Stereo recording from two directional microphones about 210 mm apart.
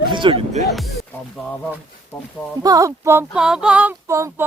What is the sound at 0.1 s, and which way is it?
Speech, 25° right (ahead or behind).